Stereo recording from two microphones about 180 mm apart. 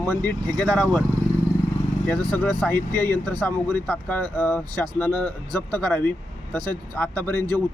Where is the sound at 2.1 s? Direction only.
10° left (ahead or behind).